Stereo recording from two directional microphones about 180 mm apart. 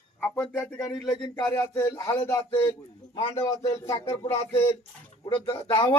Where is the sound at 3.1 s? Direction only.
30° left (ahead or behind).